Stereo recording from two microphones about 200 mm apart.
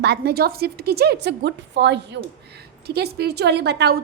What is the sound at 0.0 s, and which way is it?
A woman's voice, 55° right (ahead or behind).